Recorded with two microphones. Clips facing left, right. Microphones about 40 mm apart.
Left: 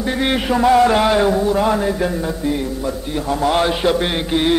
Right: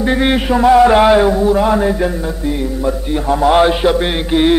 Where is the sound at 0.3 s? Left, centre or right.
Centre.